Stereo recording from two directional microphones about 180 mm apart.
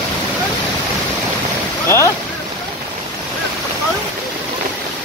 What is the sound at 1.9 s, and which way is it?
Boat, 15° left (ahead or behind).